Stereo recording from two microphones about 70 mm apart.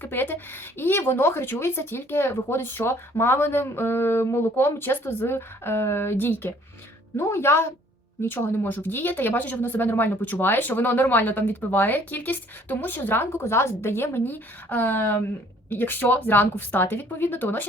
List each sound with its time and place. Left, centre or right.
0.0 s speech: left